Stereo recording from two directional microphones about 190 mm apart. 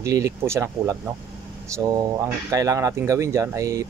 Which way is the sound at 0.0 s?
15° right (ahead or behind).